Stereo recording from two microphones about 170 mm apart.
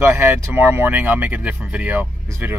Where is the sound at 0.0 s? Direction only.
15° right (ahead or behind).